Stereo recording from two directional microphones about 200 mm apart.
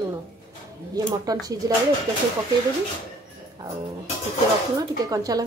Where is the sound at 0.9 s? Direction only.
20° right (ahead or behind).